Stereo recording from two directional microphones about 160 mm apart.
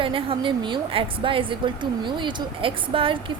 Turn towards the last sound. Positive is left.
turn(degrees=-35)  # may be behind; listen again after turning